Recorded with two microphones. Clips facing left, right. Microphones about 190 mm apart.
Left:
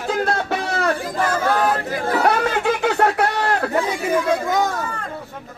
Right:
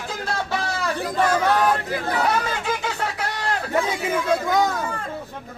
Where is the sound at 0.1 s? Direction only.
60° left (ahead or behind).